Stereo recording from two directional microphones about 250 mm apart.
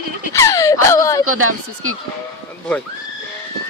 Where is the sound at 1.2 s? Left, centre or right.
Right.